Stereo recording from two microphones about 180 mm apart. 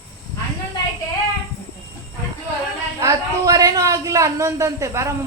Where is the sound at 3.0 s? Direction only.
20° right (ahead or behind).